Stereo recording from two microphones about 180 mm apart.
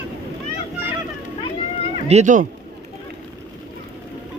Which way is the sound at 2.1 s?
40° right (ahead or behind).